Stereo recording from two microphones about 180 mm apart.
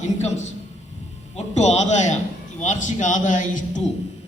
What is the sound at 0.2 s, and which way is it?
A man's voice, 40° left (ahead or behind).